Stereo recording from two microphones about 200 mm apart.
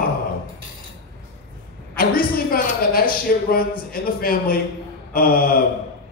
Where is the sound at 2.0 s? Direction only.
45° left (ahead or behind).